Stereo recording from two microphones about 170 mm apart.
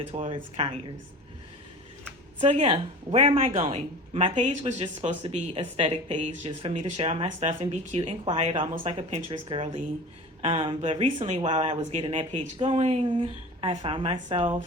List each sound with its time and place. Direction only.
0.0 s speech: 35° right (ahead or behind)
2.4 s speech: 35° right (ahead or behind)
12.0 s speech: 30° right (ahead or behind)